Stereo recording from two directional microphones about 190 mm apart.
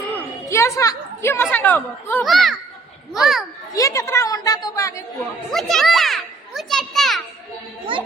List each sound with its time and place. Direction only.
0.2 s a woman's voice: 15° left (ahead or behind)
2.2 s a child's voice: centre (ahead or behind)
3.8 s a woman's voice: 15° left (ahead or behind)
5.5 s a child's voice: centre (ahead or behind)
7.9 s a child's voice: 25° right (ahead or behind)